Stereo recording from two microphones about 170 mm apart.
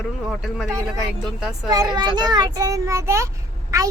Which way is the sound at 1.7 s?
25° right (ahead or behind).